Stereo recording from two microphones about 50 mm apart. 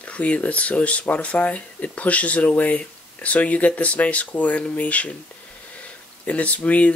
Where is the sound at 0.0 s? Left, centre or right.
Left.